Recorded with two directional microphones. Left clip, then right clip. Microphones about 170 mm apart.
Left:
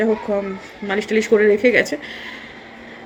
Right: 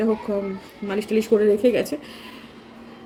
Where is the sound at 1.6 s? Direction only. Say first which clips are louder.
Left 5 dB; 5° right (ahead or behind).